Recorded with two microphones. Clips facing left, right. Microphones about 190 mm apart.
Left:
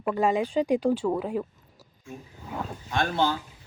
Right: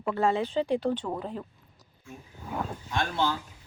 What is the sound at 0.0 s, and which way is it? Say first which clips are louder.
Speech: left 2 dB; 15° left (ahead or behind).